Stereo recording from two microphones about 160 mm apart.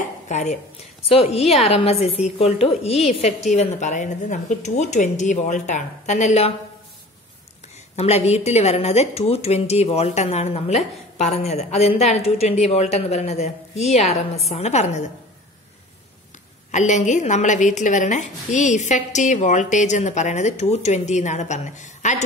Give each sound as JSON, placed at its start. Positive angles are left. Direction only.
{"t": 0.3, "sound": "a woman's voice", "side_deg": 45}
{"t": 7.9, "sound": "a woman's voice", "side_deg": 40}
{"t": 16.7, "sound": "a woman's voice", "side_deg": 50}